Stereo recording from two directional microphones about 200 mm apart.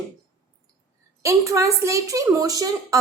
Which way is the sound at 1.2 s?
15° right (ahead or behind).